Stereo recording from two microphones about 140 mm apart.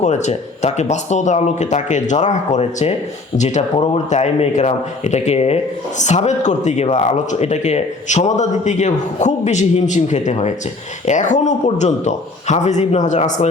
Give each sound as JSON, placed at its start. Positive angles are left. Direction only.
{"t": 0.0, "sound": "a man's voice", "side_deg": 55}